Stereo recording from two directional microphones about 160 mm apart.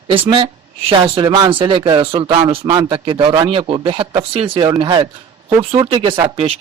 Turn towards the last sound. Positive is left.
turn(degrees=-35)  # may be behind; listen again after turning